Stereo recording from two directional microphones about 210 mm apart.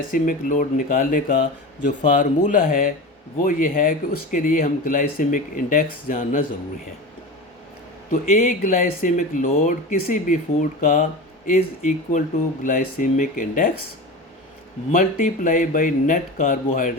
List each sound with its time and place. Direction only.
0.1 s speech: 40° left (ahead or behind)
8.1 s speech: 35° left (ahead or behind)
14.9 s speech: 40° left (ahead or behind)